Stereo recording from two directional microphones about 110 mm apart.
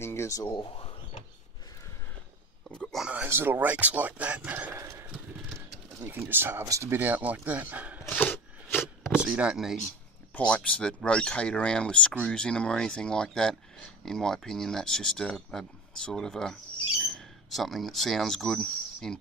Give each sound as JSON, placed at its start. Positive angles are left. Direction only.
{"t": 0.0, "sound": "speech", "side_deg": 25}
{"t": 0.7, "sound": "speech", "side_deg": 55}
{"t": 2.7, "sound": "a sound", "side_deg": 5}
{"t": 3.3, "sound": "speech", "side_deg": -20}
{"t": 5.9, "sound": "speech", "side_deg": -20}
{"t": 8.1, "sound": "a sound", "side_deg": 15}
{"t": 9.1, "sound": "speech", "side_deg": -10}
{"t": 10.3, "sound": "speech", "side_deg": 10}